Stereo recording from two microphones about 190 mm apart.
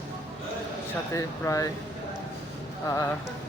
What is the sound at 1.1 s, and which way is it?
Speech, 15° left (ahead or behind).